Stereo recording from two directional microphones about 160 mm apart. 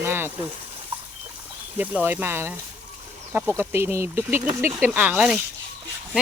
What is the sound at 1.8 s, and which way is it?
Speech, 10° right (ahead or behind).